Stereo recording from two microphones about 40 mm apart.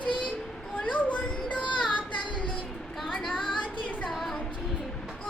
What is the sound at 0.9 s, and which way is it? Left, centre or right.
Music, left.